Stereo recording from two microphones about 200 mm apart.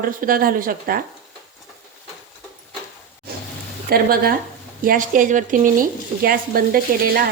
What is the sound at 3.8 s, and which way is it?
A woman's voice, 50° right (ahead or behind).